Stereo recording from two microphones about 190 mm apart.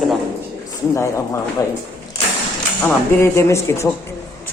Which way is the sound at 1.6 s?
20° left (ahead or behind).